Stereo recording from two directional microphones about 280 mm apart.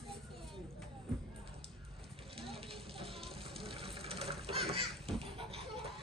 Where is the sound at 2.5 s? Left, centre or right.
Centre.